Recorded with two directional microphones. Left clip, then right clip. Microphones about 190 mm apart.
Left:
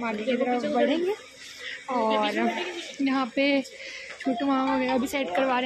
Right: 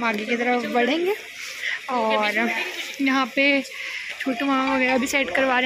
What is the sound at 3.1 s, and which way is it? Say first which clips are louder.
Speech: right 5 dB; 5° left (ahead or behind).